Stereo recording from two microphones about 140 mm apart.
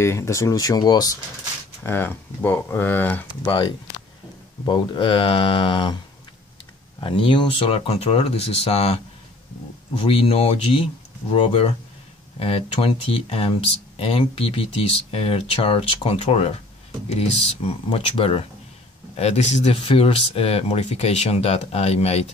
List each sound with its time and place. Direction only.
0.0 s speech: 20° left (ahead or behind)
1.8 s speech: 15° left (ahead or behind)
3.4 s speech: 40° left (ahead or behind)
7.0 s speech: 40° left (ahead or behind)
10.0 s speech: 45° left (ahead or behind)
17.6 s speech: 40° left (ahead or behind)
19.1 s speech: 50° left (ahead or behind)